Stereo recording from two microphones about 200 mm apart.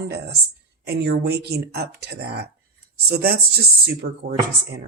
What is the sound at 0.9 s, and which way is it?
Speech, 55° right (ahead or behind).